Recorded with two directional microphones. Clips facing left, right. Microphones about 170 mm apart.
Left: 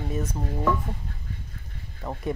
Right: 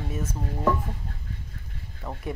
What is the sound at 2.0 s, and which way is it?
Speech, 10° left (ahead or behind).